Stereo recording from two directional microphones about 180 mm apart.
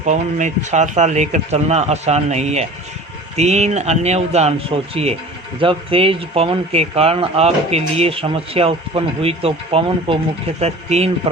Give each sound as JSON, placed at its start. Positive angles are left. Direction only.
{"t": 0.0, "sound": "speech", "side_deg": -45}
{"t": 5.5, "sound": "speech", "side_deg": -30}